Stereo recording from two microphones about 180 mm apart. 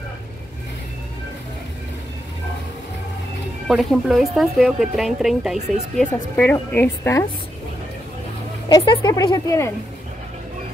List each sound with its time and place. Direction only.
3.6 s a woman's voice: centre (ahead or behind)
8.6 s a woman's voice: 25° left (ahead or behind)